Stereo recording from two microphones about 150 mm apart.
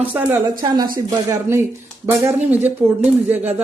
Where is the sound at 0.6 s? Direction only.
25° right (ahead or behind); by 3.6 s 10° right (ahead or behind).